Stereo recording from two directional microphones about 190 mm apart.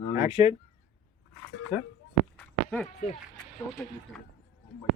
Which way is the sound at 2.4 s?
5° left (ahead or behind).